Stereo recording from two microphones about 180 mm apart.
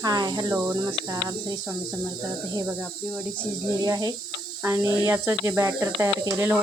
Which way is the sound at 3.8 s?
20° right (ahead or behind).